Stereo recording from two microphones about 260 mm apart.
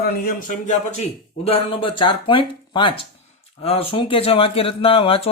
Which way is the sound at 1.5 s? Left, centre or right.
Centre.